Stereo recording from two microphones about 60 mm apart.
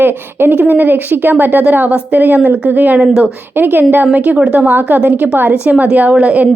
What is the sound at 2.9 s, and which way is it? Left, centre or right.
Speech, centre.